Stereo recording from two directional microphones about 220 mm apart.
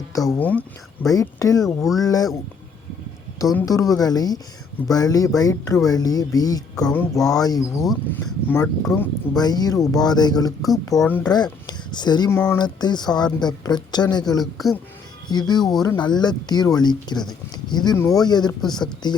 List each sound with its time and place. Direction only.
0.2 s speech: 5° left (ahead or behind)
1.6 s speech: centre (ahead or behind)
2.0 s speech: 15° left (ahead or behind)
3.5 s speech: 15° left (ahead or behind)
6.8 s speech: 5° left (ahead or behind)
9.3 s speech: 15° left (ahead or behind)
10.9 s speech: 5° left (ahead or behind)
11.6 s a sound: 20° left (ahead or behind)
12.4 s speech: 15° left (ahead or behind)